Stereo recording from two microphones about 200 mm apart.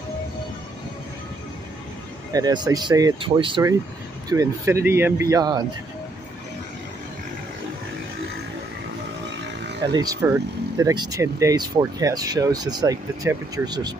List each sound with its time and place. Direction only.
2.3 s speech: 20° right (ahead or behind)
9.9 s speech: 15° right (ahead or behind)